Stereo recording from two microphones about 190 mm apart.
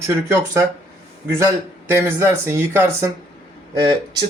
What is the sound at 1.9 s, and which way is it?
Speech, 15° right (ahead or behind).